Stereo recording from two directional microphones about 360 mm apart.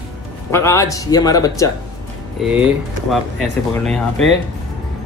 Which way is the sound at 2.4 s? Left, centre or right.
Centre.